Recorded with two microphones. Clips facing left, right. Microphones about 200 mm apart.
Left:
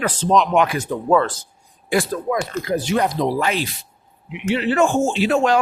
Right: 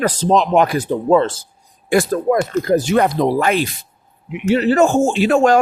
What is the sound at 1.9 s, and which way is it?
Speech, 50° right (ahead or behind).